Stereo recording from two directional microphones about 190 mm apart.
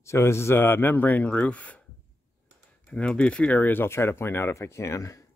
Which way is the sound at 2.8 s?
5° left (ahead or behind).